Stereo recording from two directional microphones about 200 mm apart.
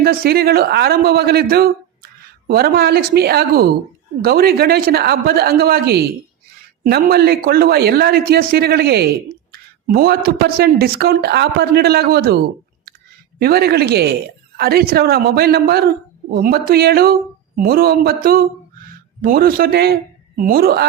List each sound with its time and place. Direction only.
0.0 s a woman's voice: 50° right (ahead or behind)
13.4 s a woman's voice: 50° right (ahead or behind)